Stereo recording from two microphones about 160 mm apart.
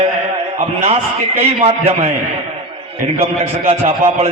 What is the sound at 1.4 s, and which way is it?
Speech, 40° right (ahead or behind).